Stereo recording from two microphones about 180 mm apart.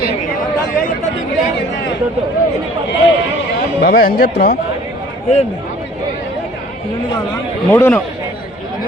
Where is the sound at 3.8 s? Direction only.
60° left (ahead or behind).